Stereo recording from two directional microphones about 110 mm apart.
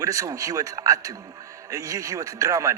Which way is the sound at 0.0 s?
30° right (ahead or behind).